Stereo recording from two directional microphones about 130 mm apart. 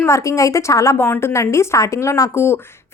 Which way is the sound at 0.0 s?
25° left (ahead or behind).